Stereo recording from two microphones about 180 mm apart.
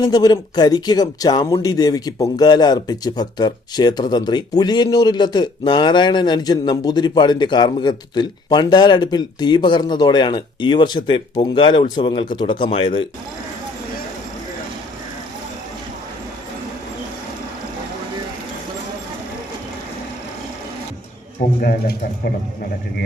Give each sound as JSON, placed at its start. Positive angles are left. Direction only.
{"t": 0.0, "sound": "speech", "side_deg": 20}
{"t": 21.6, "sound": "speech", "side_deg": 55}